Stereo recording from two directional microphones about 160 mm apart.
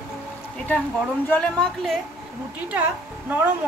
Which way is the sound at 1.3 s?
5° left (ahead or behind).